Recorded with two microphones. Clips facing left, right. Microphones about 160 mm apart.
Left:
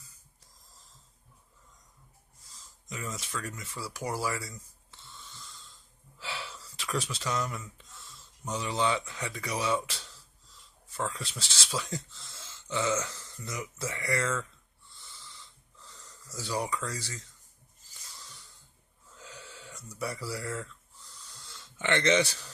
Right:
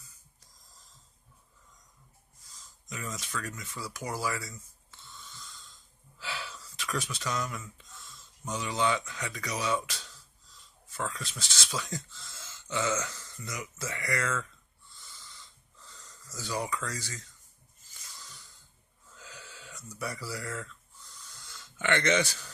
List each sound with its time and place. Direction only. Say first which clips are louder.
2.9 s speech: even; 25° left (ahead or behind)
6.1 s speech: even; 25° left (ahead or behind)
16.3 s speech: left 1 dB; 30° left (ahead or behind)
19.1 s a sound: left 2 dB; 25° left (ahead or behind)
21.4 s speech: even; 30° left (ahead or behind)